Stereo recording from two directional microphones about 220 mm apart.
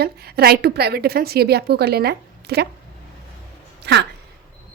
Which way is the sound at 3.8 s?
50° right (ahead or behind).